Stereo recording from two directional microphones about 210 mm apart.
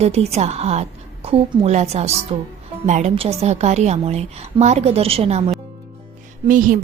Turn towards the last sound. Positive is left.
turn(degrees=-40)  # may be behind; listen again after turning